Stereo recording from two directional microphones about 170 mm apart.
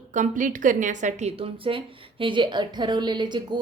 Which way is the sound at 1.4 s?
30° right (ahead or behind).